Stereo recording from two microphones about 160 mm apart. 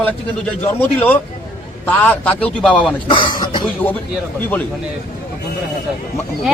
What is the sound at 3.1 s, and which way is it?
Speech, 30° left (ahead or behind).